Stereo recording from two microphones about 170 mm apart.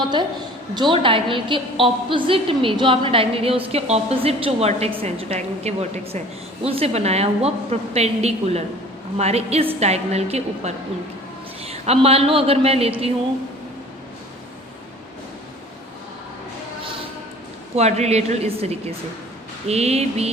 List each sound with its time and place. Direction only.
0.0 s a woman's voice: 25° right (ahead or behind)
17.7 s a woman's voice: 40° right (ahead or behind)